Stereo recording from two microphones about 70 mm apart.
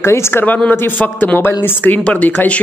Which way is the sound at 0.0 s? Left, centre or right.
Left.